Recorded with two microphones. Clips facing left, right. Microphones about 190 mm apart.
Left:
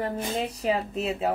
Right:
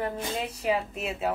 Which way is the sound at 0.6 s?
35° left (ahead or behind).